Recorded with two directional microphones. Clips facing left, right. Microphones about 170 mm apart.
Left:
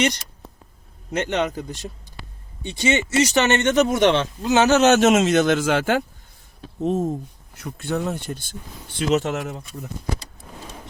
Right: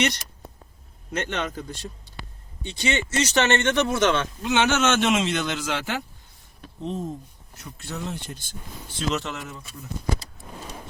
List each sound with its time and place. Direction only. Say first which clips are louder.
1.1 s speech: left 6 dB; 15° left (ahead or behind)
4.4 s speech: left 7 dB; 35° left (ahead or behind)
7.6 s speech: left 9 dB; 60° left (ahead or behind)
9.0 s speech: left 7 dB; 45° left (ahead or behind)